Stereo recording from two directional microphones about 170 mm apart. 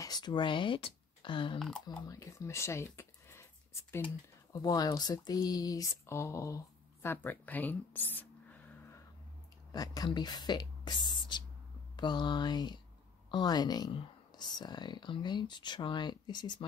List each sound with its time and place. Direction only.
0.0 s speech: 25° left (ahead or behind)
9.7 s speech: 25° left (ahead or behind)